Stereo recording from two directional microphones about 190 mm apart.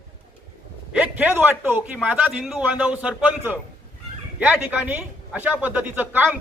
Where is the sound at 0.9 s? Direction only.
10° right (ahead or behind).